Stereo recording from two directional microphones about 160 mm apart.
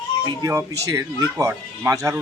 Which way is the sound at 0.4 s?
20° right (ahead or behind).